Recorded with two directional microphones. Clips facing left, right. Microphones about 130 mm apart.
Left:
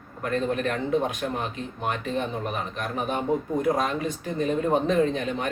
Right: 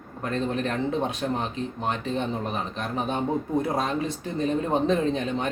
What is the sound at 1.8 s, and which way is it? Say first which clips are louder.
Speech: left 1 dB; 30° right (ahead or behind).